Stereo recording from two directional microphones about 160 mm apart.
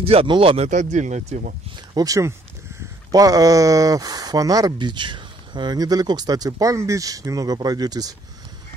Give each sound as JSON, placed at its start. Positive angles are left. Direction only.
{"t": 0.0, "sound": "speech", "side_deg": -35}
{"t": 0.7, "sound": "speech", "side_deg": -45}
{"t": 2.0, "sound": "speech", "side_deg": -20}